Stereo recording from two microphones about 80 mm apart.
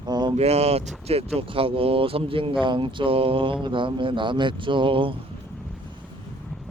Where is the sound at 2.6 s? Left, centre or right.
Right.